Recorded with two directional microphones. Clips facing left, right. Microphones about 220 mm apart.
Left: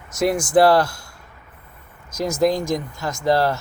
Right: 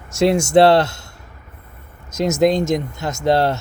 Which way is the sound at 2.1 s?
25° right (ahead or behind).